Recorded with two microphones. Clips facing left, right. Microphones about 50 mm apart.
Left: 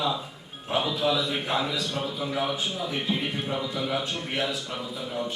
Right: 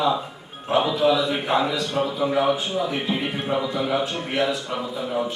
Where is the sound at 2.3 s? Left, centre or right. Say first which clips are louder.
Right 6 dB; centre.